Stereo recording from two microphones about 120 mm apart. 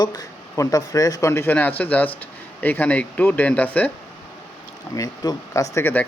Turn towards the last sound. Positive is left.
turn(degrees=20)  # may be behind; listen again after turning